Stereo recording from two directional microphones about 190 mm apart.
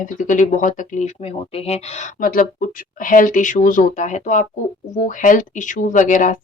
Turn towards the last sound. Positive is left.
turn(degrees=45)  # may be behind; listen again after turning